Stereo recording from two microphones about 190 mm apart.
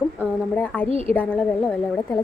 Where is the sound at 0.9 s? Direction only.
30° right (ahead or behind).